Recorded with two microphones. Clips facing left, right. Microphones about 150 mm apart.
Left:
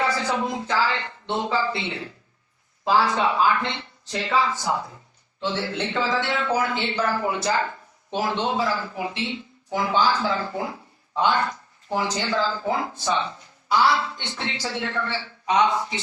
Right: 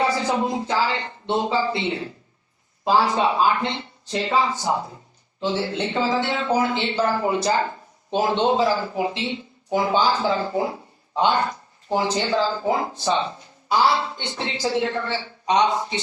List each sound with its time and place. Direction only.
0.0 s a man's voice: 20° right (ahead or behind)